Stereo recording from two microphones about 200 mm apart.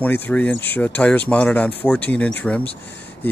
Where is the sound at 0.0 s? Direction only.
5° left (ahead or behind).